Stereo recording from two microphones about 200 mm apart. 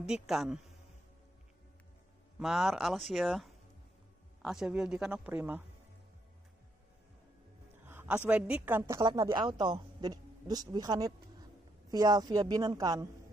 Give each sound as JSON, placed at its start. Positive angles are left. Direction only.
{"t": 0.0, "sound": "speech", "side_deg": -5}
{"t": 2.3, "sound": "speech", "side_deg": 0}
{"t": 7.8, "sound": "a sound", "side_deg": -10}
{"t": 8.3, "sound": "a woman's voice", "side_deg": -5}